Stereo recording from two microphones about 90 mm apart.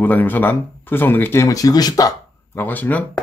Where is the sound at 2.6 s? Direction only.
20° left (ahead or behind).